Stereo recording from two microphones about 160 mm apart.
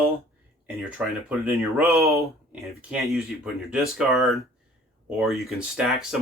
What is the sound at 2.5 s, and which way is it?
Speech, 5° right (ahead or behind).